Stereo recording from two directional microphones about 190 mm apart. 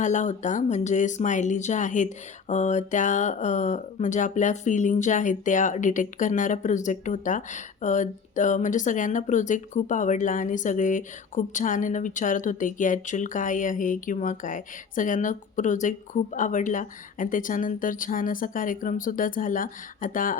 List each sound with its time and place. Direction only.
0.0 s speech: 40° left (ahead or behind)